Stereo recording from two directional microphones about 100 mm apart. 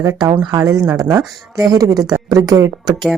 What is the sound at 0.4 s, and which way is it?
A woman's voice, 45° right (ahead or behind).